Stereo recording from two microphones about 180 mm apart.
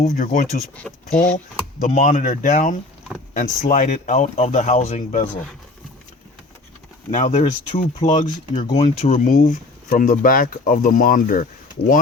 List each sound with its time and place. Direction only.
0.0 s speech: 45° left (ahead or behind)
1.1 s speech: 5° left (ahead or behind)
1.8 s speech: 40° left (ahead or behind)
7.1 s speech: 40° left (ahead or behind)